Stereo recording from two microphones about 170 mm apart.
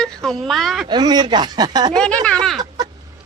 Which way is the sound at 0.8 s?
25° right (ahead or behind).